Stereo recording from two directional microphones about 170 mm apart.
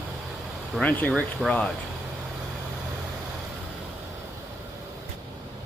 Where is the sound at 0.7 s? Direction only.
10° left (ahead or behind).